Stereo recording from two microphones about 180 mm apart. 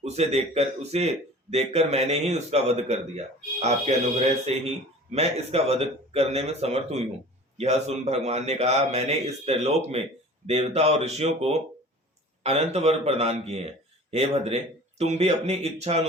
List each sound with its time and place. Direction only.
0.0 s speech: 35° right (ahead or behind)